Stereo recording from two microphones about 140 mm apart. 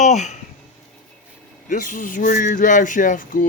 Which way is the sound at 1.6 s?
75° left (ahead or behind).